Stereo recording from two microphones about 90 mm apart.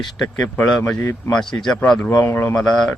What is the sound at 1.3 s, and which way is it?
Speech, 5° left (ahead or behind).